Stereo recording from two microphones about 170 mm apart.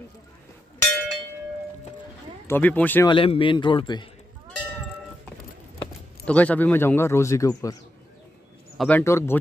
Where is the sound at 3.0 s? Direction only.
30° left (ahead or behind).